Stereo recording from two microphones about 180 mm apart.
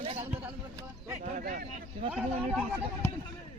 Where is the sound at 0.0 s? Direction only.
35° right (ahead or behind).